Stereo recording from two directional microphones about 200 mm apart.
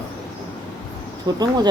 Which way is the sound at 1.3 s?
20° right (ahead or behind).